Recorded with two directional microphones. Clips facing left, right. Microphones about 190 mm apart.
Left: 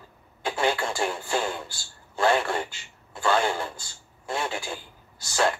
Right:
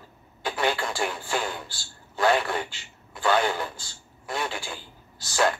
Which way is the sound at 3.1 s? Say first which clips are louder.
Even; 25° left (ahead or behind).